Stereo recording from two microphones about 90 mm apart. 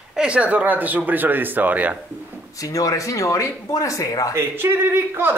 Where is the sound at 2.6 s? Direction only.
40° left (ahead or behind).